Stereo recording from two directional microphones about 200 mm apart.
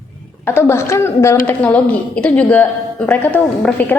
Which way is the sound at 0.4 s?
10° left (ahead or behind).